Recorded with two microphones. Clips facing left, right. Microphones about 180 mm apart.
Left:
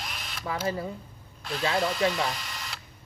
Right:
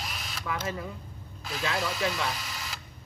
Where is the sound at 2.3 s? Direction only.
5° right (ahead or behind).